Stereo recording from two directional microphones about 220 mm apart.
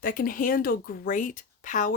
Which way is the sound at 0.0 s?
40° left (ahead or behind).